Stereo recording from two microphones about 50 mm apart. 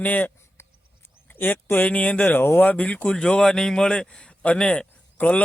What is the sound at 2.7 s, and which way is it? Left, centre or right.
A man's voice, left.